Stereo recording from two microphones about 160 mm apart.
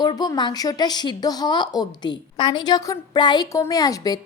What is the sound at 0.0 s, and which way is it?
A woman's voice, 25° left (ahead or behind).